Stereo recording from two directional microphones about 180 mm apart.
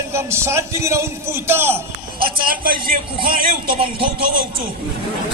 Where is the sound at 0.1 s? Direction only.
15° right (ahead or behind).